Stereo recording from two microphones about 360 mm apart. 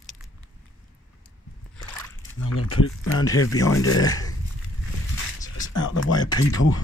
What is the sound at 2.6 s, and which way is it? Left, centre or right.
Speech, left.